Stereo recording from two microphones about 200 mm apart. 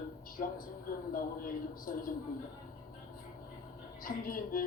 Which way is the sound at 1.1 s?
45° left (ahead or behind).